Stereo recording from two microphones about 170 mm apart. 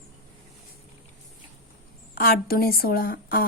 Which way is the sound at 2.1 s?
60° left (ahead or behind).